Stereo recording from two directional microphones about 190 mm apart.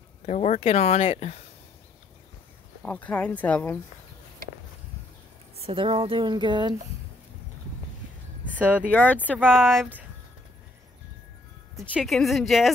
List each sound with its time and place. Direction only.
0.3 s speech: 35° left (ahead or behind)
2.8 s speech: 5° left (ahead or behind)
5.6 s speech: 30° right (ahead or behind)
8.5 s a sound: 10° right (ahead or behind)
8.9 s speech: 10° left (ahead or behind)
11.9 s speech: centre (ahead or behind)